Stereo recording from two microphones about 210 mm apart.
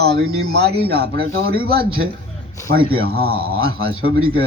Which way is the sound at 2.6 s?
15° left (ahead or behind).